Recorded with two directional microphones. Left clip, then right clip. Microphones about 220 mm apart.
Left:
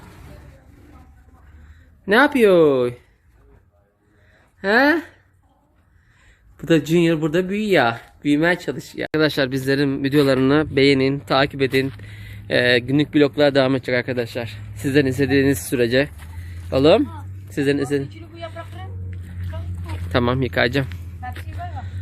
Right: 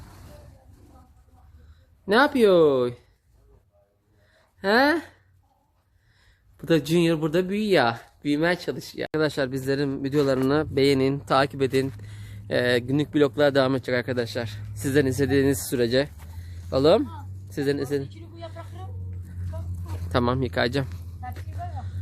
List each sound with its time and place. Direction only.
2.0 s speech: centre (ahead or behind)
4.6 s speech: 5° right (ahead or behind)
6.6 s speech: centre (ahead or behind)
18.0 s a sound: 20° left (ahead or behind)
20.1 s speech: centre (ahead or behind)
21.2 s vehicle: centre (ahead or behind)